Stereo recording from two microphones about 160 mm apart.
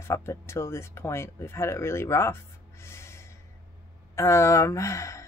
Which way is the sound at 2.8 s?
15° left (ahead or behind).